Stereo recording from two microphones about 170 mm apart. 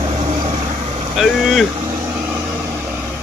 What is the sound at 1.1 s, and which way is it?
Vehicle, centre (ahead or behind).